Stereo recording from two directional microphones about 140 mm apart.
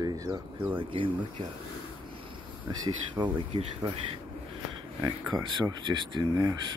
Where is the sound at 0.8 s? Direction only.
40° right (ahead or behind).